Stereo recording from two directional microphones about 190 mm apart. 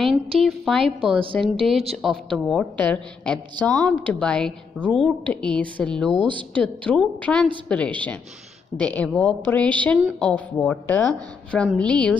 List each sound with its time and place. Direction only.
0.4 s a woman's voice: centre (ahead or behind)
6.2 s speech: 25° right (ahead or behind)
6.6 s a woman's voice: 5° left (ahead or behind)